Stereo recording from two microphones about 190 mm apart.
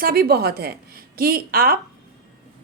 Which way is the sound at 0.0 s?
55° right (ahead or behind).